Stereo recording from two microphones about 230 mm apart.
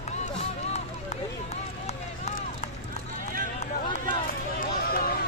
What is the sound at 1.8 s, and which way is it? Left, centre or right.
Run, left.